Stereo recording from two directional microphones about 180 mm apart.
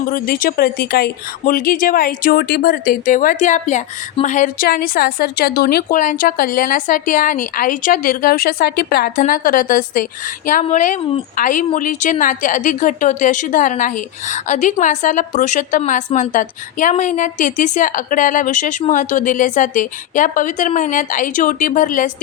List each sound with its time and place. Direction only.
0.1 s speech: 50° left (ahead or behind)